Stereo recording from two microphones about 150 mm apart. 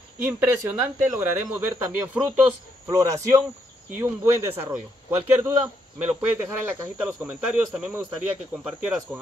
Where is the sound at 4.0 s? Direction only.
15° right (ahead or behind).